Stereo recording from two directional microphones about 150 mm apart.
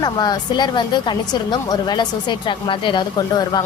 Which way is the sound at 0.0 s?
30° left (ahead or behind).